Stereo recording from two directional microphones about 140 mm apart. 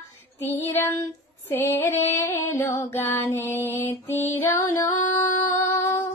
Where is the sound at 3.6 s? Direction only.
15° left (ahead or behind).